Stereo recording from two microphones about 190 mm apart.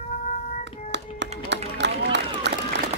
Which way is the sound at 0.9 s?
65° right (ahead or behind).